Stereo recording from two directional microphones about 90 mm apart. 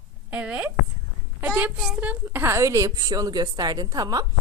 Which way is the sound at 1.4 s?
15° right (ahead or behind).